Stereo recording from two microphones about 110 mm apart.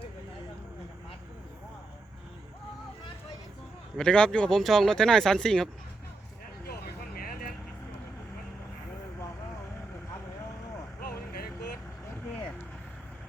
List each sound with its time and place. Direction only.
3.9 s speech: 5° left (ahead or behind)